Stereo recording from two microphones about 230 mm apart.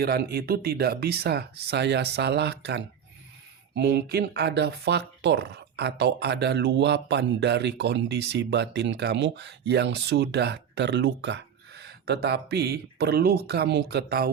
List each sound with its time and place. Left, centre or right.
0.0 s speech: right